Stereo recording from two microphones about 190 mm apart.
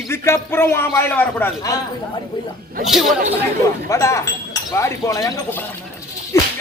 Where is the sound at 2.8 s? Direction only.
Centre (ahead or behind).